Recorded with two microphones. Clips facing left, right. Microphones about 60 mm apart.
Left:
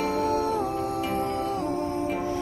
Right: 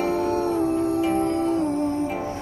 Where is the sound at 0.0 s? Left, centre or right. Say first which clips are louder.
Right 2 dB; right.